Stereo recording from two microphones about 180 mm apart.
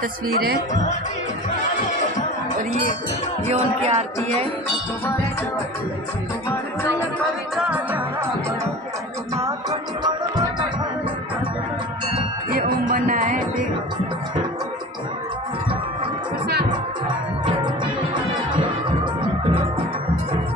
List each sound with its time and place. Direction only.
0.3 s speech: 60° right (ahead or behind)
3.4 s music: 35° right (ahead or behind)
7.5 s music: 10° right (ahead or behind)
9.3 s music: 20° right (ahead or behind)
12.8 s music: 50° right (ahead or behind)